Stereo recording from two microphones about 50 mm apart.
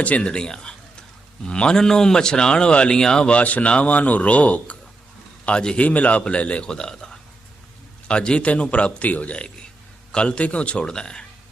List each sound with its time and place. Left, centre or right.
0.0 s a man's voice: left
10.1 s speech: centre